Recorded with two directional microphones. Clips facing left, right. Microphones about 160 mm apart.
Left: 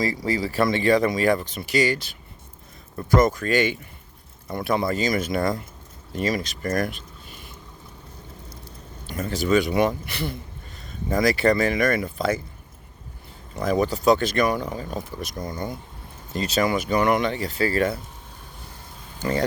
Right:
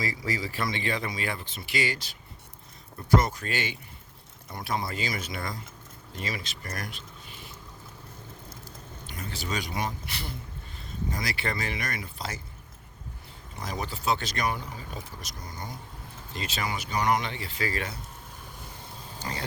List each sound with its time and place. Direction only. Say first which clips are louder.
0.0 s speech: left 7 dB; 30° left (ahead or behind)
0.6 s speech: left 14 dB; 45° left (ahead or behind)
9.1 s speech: left 13 dB; 50° left (ahead or behind)
11.2 s speech: left 16 dB; 45° left (ahead or behind)
13.7 s speech: left 11 dB; 50° left (ahead or behind)
16.3 s speech: left 11 dB; 40° left (ahead or behind)
17.3 s speech: left 9 dB; 40° left (ahead or behind)